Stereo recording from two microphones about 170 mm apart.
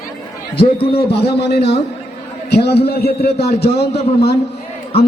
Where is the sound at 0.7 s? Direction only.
35° left (ahead or behind).